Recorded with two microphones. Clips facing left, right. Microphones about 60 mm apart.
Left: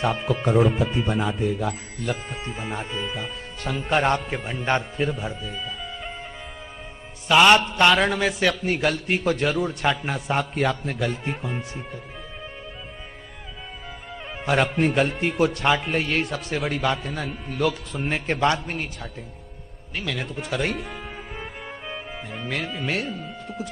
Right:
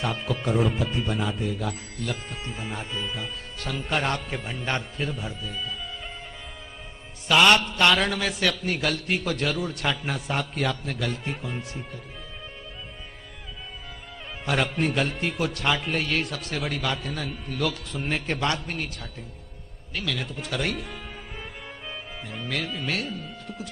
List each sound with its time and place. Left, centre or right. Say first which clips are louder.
0.4 s speech: left 5 dB; centre
7.2 s speech: left 3 dB; centre
14.4 s speech: left 4 dB; centre
20.2 s music: left 3 dB; centre